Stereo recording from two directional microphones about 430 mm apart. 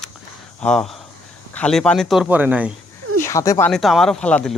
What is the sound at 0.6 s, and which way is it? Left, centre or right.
Speech, centre.